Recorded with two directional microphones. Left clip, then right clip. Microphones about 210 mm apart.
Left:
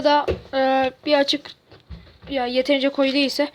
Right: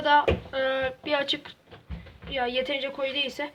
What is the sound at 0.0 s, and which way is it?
A woman's voice, 30° left (ahead or behind).